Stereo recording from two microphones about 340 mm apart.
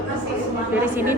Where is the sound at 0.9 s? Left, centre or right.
Centre.